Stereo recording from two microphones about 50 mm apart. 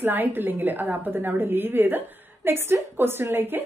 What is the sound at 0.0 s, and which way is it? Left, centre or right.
A woman's voice, right.